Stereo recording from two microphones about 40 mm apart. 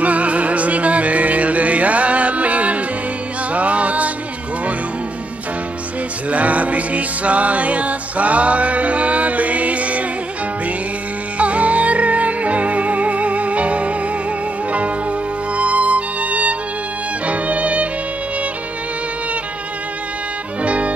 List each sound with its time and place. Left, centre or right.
0.0 s music: right
6.3 s music: right
11.3 s music: right
17.3 s violin: right
20.6 s music: right